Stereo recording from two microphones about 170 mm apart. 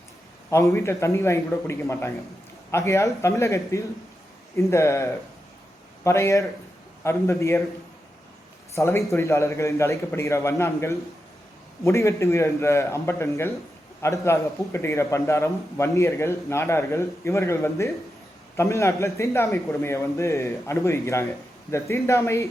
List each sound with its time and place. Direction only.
0.5 s a man's voice: 15° left (ahead or behind)
8.7 s a man's voice: 15° left (ahead or behind)